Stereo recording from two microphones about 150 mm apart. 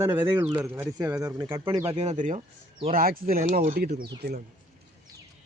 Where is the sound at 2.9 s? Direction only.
75° right (ahead or behind).